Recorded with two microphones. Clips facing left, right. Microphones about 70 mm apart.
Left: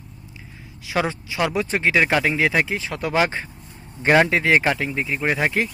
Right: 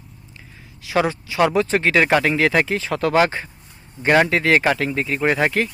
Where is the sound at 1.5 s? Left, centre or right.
Centre.